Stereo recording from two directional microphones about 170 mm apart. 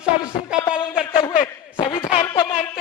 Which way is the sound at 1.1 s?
30° left (ahead or behind).